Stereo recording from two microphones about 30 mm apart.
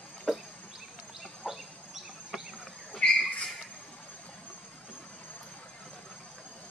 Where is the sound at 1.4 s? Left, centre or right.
Centre.